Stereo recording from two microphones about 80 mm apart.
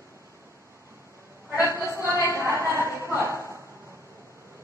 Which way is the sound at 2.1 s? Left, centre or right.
Left.